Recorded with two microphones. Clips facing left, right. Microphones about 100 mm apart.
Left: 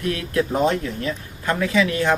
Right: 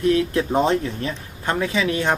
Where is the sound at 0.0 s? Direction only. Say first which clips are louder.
Right 4 dB; 30° right (ahead or behind).